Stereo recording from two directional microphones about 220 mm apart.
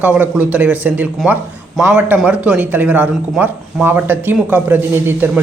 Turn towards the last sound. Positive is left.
turn(degrees=-10)  # may be behind; listen again after turning